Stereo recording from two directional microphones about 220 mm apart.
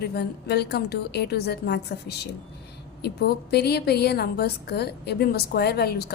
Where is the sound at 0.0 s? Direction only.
45° left (ahead or behind).